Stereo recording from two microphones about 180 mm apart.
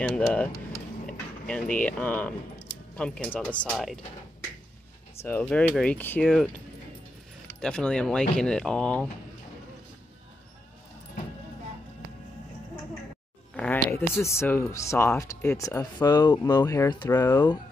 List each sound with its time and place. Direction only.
0.0 s speech: 5° left (ahead or behind)
1.8 s speech: 10° left (ahead or behind)
5.5 s speech: 5° left (ahead or behind)
13.6 s speech: 10° left (ahead or behind)